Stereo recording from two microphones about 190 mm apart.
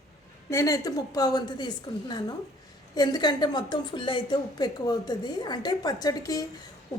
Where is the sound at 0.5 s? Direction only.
20° left (ahead or behind).